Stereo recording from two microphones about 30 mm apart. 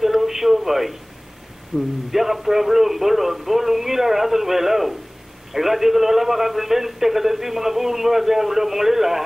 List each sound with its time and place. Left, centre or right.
0.0 s a sound: centre
1.7 s a man's voice: centre
2.0 s a man's voice: centre